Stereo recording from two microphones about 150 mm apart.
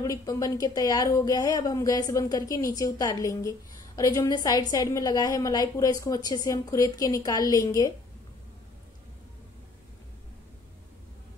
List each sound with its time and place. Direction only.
0.0 s speech: 20° left (ahead or behind)